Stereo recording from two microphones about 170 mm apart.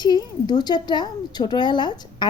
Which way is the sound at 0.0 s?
25° left (ahead or behind).